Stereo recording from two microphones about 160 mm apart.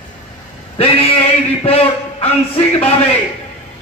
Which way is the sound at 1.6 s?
40° left (ahead or behind).